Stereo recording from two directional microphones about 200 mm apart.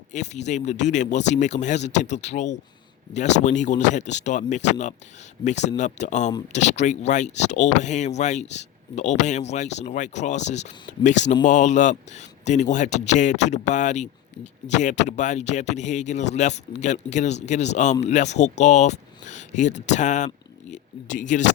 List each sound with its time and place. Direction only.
0.1 s speech: 35° left (ahead or behind)